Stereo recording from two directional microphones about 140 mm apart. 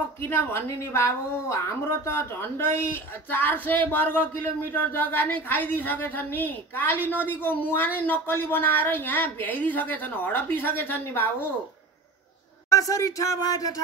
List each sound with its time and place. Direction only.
0.2 s a woman's voice: 15° left (ahead or behind)
12.6 s speech: 25° left (ahead or behind)